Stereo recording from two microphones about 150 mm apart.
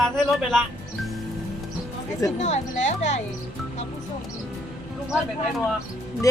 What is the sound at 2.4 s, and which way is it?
Speech, 50° left (ahead or behind).